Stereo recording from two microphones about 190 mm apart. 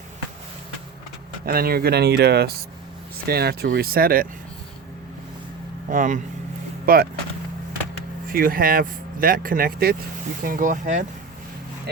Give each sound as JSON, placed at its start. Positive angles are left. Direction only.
{"t": 1.5, "sound": "speech", "side_deg": -55}
{"t": 5.9, "sound": "speech", "side_deg": -45}
{"t": 8.3, "sound": "speech", "side_deg": -50}